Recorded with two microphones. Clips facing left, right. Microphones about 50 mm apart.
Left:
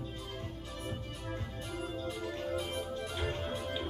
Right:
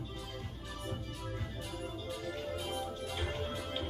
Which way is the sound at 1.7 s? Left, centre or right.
Left.